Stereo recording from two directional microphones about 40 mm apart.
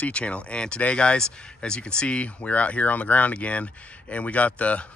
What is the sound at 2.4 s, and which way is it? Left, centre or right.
Speech, left.